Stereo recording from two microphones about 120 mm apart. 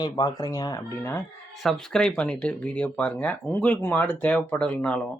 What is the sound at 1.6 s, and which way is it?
Speech, 5° left (ahead or behind).